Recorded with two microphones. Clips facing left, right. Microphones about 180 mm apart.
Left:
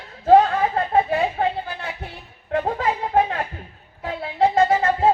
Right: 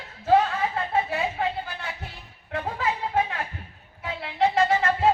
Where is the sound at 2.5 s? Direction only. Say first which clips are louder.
Left 6 dB; 45° left (ahead or behind).